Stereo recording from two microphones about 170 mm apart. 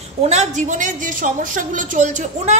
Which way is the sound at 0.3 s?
45° right (ahead or behind).